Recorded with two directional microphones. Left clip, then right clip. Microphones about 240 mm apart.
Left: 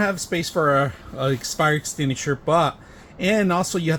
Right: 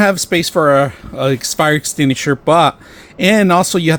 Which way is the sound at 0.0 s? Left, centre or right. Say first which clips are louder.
Right 10 dB; right.